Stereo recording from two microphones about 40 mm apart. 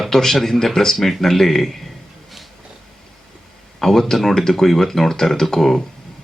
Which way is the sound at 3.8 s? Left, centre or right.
Centre.